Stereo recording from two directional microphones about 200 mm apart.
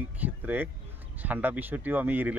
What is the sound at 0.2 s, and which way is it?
Speech, 10° right (ahead or behind).